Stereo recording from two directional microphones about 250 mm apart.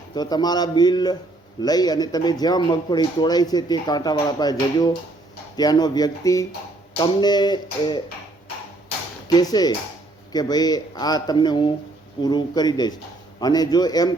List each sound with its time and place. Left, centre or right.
0.1 s speech: centre
9.2 s speech: centre